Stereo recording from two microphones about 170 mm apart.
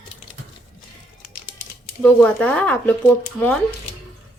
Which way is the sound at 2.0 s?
10° left (ahead or behind).